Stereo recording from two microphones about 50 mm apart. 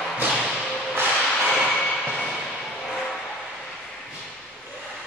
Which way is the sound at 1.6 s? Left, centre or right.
Centre.